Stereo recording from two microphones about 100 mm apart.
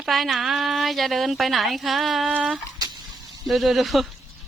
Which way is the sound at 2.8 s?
40° right (ahead or behind).